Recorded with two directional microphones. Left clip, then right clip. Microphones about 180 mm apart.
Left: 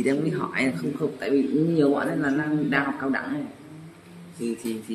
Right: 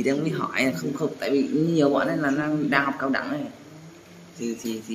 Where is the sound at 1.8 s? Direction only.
15° right (ahead or behind).